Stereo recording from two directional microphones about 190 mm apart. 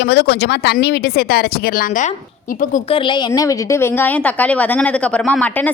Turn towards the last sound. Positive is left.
turn(degrees=5)  # may be behind; listen again after turning